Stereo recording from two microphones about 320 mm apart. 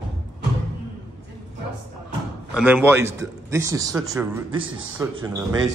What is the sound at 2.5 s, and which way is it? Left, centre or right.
A man's voice, centre.